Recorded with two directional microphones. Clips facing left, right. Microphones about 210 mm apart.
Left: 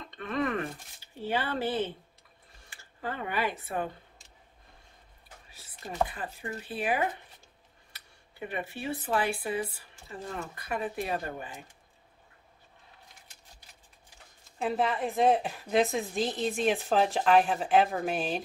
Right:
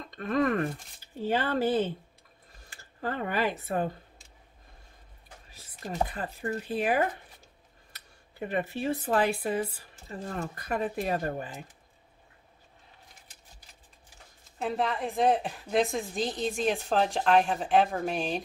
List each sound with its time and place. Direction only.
0.0 s speech: 45° right (ahead or behind)
5.9 s speech: 40° right (ahead or behind)
14.6 s a woman's voice: centre (ahead or behind)